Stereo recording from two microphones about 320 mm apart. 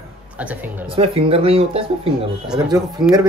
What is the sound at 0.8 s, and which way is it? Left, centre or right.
Speech, centre.